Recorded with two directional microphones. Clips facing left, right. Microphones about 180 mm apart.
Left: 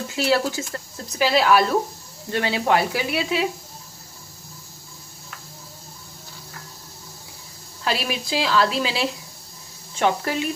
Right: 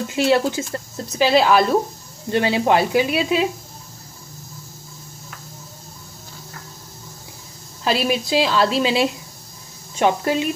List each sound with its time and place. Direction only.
0.1 s a woman's voice: 20° right (ahead or behind)
7.8 s a woman's voice: 20° right (ahead or behind)